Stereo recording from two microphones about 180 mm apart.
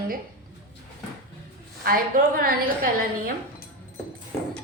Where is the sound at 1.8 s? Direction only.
55° right (ahead or behind).